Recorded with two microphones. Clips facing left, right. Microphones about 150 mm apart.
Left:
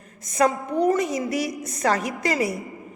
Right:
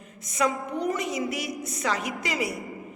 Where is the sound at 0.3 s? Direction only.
40° left (ahead or behind).